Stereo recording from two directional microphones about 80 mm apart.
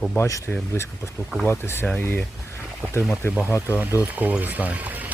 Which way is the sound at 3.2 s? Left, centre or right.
Left.